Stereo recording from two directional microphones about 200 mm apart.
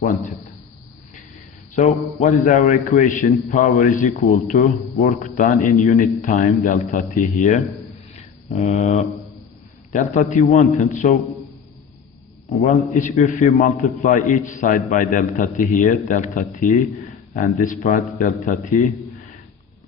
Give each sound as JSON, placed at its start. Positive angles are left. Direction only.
{"t": 1.7, "sound": "a man's voice", "side_deg": 35}
{"t": 8.1, "sound": "a sound", "side_deg": 35}
{"t": 9.9, "sound": "a man's voice", "side_deg": 40}
{"t": 12.6, "sound": "a man's voice", "side_deg": 35}